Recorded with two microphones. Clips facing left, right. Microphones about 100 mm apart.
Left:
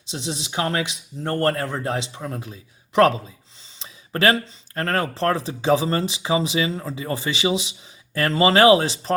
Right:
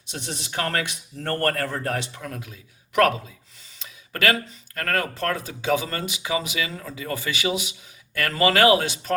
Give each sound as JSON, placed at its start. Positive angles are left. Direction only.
{"t": 0.1, "sound": "speech", "side_deg": 20}
{"t": 3.8, "sound": "a sound", "side_deg": 30}
{"t": 5.1, "sound": "speech", "side_deg": 30}